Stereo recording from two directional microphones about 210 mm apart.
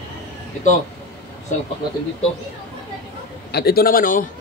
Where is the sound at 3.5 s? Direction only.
50° left (ahead or behind).